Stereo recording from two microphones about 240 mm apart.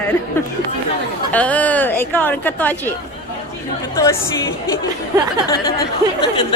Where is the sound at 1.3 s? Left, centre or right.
Centre.